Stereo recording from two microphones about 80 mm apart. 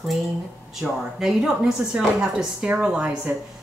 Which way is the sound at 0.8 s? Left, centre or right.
Centre.